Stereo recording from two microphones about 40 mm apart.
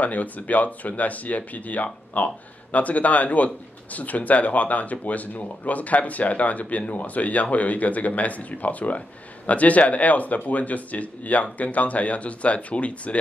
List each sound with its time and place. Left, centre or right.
0.0 s speech: left